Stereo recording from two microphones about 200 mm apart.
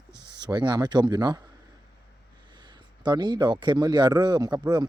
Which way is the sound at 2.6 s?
20° right (ahead or behind).